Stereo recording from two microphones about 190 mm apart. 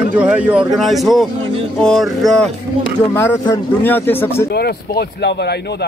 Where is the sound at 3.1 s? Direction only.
15° left (ahead or behind).